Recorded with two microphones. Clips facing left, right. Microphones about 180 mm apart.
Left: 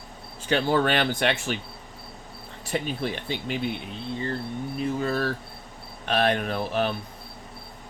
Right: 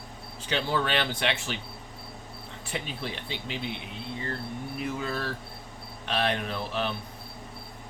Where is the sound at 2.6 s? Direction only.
45° left (ahead or behind).